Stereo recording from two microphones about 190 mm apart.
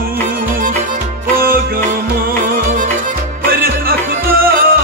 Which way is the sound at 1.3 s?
50° right (ahead or behind).